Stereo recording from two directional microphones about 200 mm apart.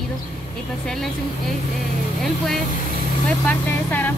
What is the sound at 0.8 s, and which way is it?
Speech, centre (ahead or behind).